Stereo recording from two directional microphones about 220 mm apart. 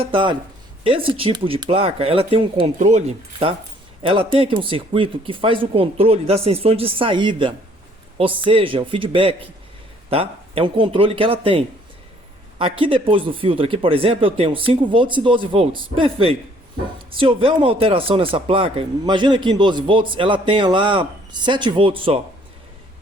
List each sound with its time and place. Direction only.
0.0 s speech: 20° right (ahead or behind)